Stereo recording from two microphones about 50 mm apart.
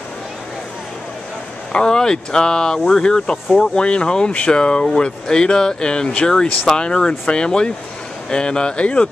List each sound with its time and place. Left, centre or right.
1.7 s speech: centre